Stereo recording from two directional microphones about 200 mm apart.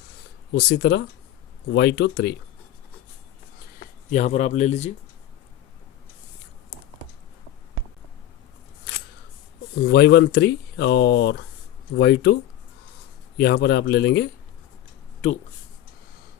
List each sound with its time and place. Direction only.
0.5 s speech: 55° left (ahead or behind)
4.1 s a man's voice: 35° left (ahead or behind)
9.8 s speech: 55° left (ahead or behind)